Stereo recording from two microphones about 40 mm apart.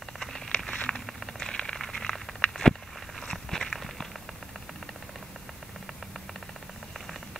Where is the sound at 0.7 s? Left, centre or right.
Left.